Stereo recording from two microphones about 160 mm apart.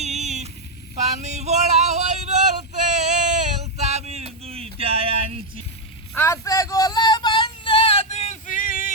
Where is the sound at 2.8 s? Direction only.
45° right (ahead or behind).